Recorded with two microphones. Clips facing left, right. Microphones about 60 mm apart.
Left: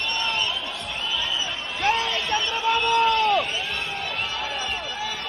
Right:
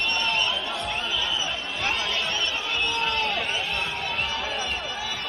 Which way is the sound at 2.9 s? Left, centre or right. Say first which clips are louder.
Left 9 dB; left.